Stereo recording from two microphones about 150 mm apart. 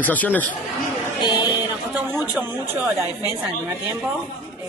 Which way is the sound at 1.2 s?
30° left (ahead or behind).